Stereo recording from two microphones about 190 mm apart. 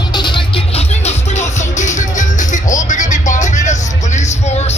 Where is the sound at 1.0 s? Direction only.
40° left (ahead or behind).